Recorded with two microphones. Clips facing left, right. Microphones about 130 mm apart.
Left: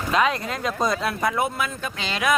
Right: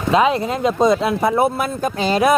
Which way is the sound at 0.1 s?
25° right (ahead or behind).